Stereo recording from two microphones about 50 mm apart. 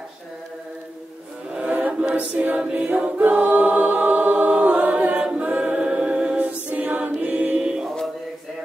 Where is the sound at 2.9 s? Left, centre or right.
Right.